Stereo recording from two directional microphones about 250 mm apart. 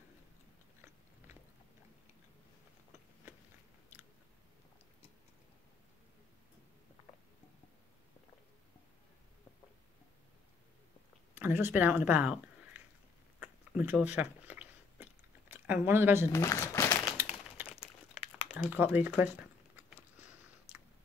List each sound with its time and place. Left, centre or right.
11.3 s speech: centre
13.4 s chewing: centre
16.3 s crumpling: centre
18.7 s a sound: centre